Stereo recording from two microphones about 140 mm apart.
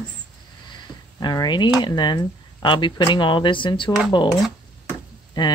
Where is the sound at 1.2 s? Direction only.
30° left (ahead or behind).